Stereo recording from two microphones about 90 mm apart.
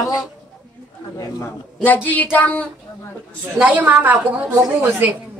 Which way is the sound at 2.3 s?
15° left (ahead or behind).